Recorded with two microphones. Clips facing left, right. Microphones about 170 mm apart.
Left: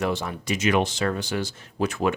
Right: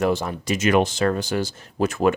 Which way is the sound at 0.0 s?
45° right (ahead or behind).